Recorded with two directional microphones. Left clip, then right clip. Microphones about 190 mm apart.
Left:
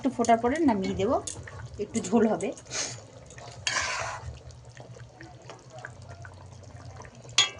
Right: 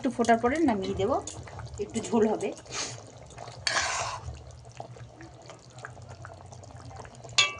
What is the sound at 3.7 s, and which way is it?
Dishes, 20° right (ahead or behind).